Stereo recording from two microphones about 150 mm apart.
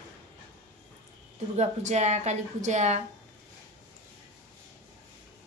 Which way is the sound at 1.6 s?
50° right (ahead or behind).